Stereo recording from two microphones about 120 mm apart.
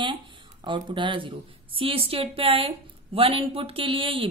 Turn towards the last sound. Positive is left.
turn(degrees=-45)  # may be behind; listen again after turning